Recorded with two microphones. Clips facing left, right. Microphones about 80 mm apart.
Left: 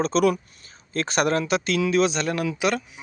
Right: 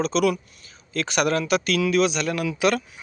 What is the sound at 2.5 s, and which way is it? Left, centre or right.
Speech, centre.